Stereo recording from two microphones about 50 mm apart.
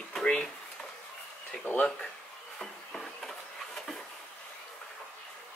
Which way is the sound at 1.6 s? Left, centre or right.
Left.